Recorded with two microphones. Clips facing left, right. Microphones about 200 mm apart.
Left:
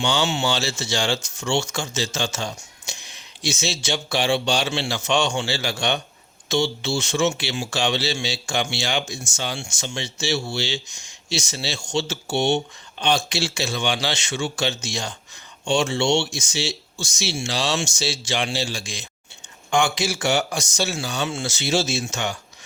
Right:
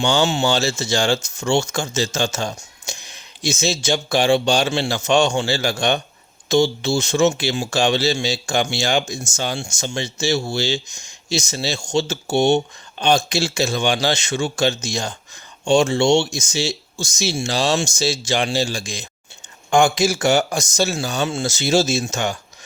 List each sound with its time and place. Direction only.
0.0 s speech: 45° right (ahead or behind)